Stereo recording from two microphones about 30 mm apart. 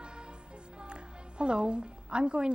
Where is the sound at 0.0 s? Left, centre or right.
Right.